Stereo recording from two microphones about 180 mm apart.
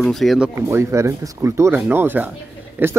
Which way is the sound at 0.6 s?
15° right (ahead or behind).